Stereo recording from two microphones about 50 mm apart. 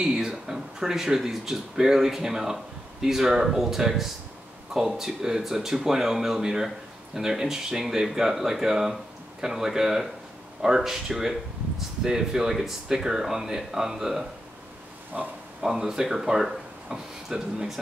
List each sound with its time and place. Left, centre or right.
0.0 s speech: centre
15.1 s speech: right
15.6 s speech: centre